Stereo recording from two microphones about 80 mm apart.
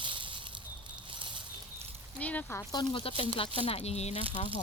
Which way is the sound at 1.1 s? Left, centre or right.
Right.